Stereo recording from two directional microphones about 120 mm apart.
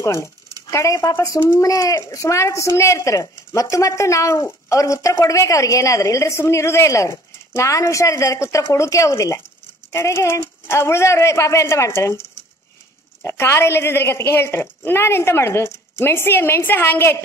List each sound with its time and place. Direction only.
0.0 s speech: 25° left (ahead or behind)
13.2 s speech: 20° left (ahead or behind)